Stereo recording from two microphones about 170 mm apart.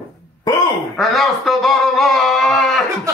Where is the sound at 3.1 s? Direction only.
20° right (ahead or behind).